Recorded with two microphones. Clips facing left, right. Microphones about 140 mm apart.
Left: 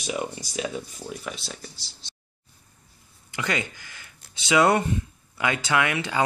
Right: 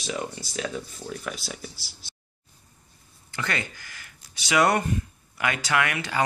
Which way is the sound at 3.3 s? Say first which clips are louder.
Left 2 dB; 15° left (ahead or behind).